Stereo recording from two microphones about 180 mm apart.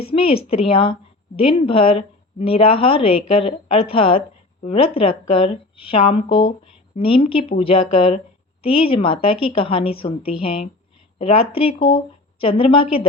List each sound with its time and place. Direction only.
0.0 s a woman's voice: 30° left (ahead or behind)